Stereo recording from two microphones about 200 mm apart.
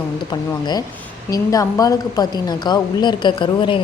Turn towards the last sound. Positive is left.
turn(degrees=25)  # may be behind; listen again after turning